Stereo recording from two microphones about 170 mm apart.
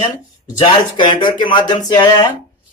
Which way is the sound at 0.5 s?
30° left (ahead or behind).